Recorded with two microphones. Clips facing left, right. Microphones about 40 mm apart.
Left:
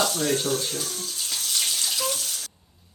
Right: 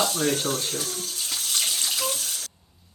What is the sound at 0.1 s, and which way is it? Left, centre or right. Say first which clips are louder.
Speech: even; right.